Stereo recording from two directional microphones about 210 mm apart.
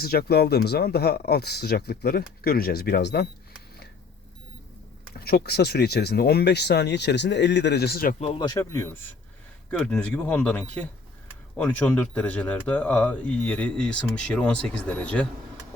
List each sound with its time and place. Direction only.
0.0 s speech: 50° left (ahead or behind)
5.1 s speech: 45° left (ahead or behind)
8.2 s speech: 25° left (ahead or behind); by 15.3 s 5° left (ahead or behind)